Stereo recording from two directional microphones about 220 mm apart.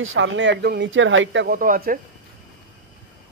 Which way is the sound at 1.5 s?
40° right (ahead or behind).